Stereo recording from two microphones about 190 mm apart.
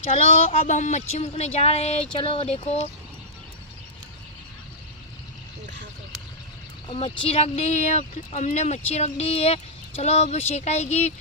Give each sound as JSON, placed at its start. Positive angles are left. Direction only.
{"t": 0.1, "sound": "speech", "side_deg": 35}
{"t": 6.9, "sound": "speech", "side_deg": 30}